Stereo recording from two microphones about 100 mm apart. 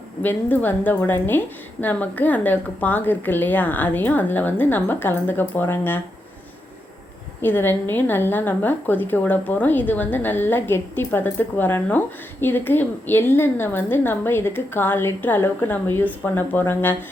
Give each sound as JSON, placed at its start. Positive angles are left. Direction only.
{"t": 0.2, "sound": "a woman's voice", "side_deg": 20}
{"t": 7.4, "sound": "a woman's voice", "side_deg": 20}